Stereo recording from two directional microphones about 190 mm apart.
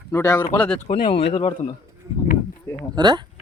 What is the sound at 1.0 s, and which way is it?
Speech, 30° left (ahead or behind).